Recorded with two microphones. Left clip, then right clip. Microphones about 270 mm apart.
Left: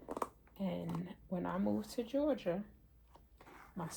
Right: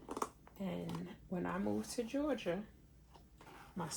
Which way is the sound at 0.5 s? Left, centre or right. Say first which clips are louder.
Left 5 dB; left.